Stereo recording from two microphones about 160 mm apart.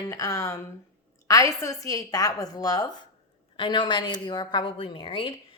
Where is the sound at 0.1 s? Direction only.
20° left (ahead or behind).